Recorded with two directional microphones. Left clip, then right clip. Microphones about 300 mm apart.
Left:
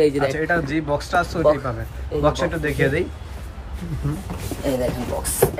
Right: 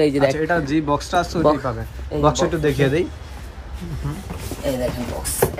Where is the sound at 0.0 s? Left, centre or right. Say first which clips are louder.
Right 1 dB; right.